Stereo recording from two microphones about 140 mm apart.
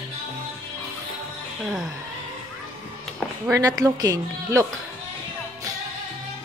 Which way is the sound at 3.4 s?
25° right (ahead or behind).